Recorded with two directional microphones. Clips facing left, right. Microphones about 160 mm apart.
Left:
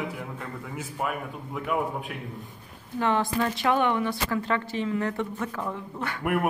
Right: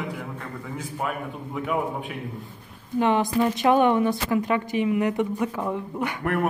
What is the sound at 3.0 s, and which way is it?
A woman's voice, 15° right (ahead or behind).